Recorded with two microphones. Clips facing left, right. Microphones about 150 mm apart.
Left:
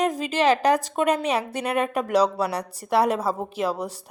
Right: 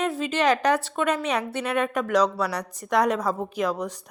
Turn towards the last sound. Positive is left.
turn(degrees=30)  # may be behind; listen again after turning